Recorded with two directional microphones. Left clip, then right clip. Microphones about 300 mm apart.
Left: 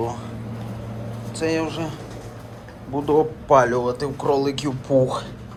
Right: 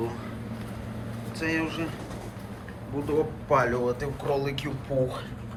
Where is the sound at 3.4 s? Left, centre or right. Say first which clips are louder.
Left 7 dB; centre.